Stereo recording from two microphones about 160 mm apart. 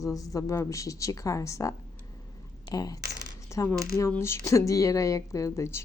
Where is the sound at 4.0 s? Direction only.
15° left (ahead or behind).